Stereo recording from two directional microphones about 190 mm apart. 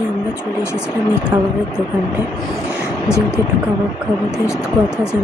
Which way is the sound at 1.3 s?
10° right (ahead or behind).